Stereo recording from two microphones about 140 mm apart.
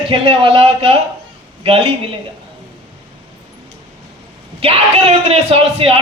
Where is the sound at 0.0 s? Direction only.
40° right (ahead or behind).